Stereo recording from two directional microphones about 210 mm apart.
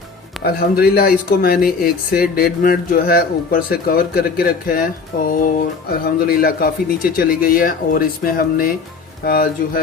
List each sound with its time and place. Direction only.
0.4 s speech: 45° left (ahead or behind)